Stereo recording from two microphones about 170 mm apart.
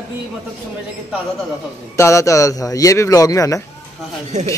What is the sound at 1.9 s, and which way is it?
A man's voice, 20° left (ahead or behind).